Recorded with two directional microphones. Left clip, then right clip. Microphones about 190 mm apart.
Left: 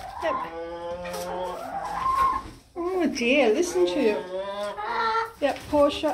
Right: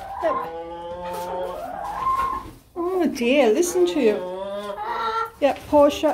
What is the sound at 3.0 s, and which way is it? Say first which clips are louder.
A woman's voice: right 3 dB; 15° right (ahead or behind).